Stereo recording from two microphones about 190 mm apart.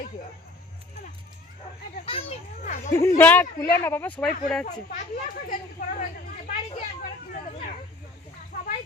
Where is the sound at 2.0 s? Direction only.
30° left (ahead or behind).